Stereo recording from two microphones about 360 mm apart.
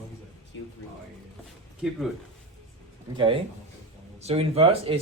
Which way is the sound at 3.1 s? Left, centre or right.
Centre.